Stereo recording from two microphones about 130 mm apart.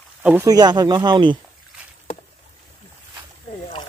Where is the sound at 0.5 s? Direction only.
30° right (ahead or behind).